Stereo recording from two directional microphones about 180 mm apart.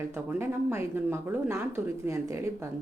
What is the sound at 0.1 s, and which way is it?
A woman's voice, 15° right (ahead or behind).